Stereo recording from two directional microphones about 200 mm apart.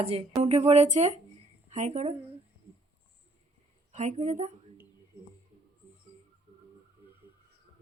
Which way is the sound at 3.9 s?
35° right (ahead or behind).